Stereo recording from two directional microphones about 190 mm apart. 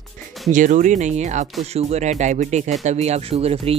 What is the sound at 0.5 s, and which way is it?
Speech, 40° right (ahead or behind).